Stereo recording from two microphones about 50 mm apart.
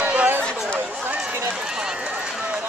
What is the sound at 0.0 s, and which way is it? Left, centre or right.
Chatter, right.